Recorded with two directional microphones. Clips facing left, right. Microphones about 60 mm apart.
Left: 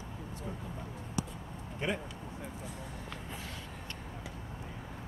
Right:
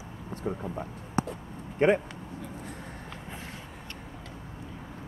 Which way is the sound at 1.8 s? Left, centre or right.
Right.